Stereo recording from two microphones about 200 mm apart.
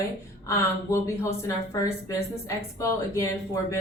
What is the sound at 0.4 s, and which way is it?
Speech, 15° left (ahead or behind).